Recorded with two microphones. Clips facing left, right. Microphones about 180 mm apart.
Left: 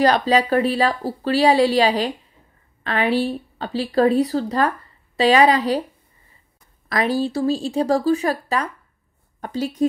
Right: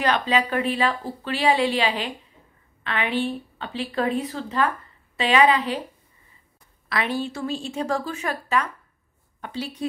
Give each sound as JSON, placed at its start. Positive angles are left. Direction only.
{"t": 0.0, "sound": "speech", "side_deg": 35}
{"t": 6.9, "sound": "a woman's voice", "side_deg": 40}